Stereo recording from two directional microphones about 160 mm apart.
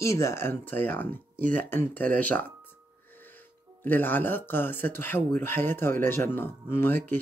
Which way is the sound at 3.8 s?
10° left (ahead or behind).